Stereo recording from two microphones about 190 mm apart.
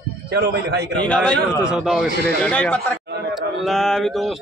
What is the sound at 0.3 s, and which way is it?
Speech, 60° right (ahead or behind).